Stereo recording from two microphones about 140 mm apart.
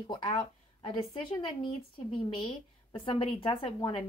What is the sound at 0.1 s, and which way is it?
A woman's voice, 30° left (ahead or behind).